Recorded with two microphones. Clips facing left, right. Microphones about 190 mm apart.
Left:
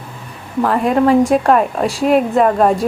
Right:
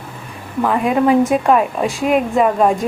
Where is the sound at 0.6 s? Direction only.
Centre (ahead or behind).